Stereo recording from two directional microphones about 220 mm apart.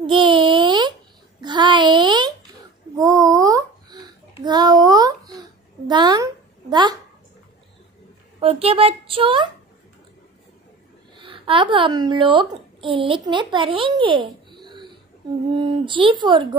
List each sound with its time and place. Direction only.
0.0 s a sound: 20° right (ahead or behind)
5.9 s a child's voice: 20° right (ahead or behind)
8.4 s a woman's voice: 25° right (ahead or behind)
11.1 s a woman's voice: 20° right (ahead or behind)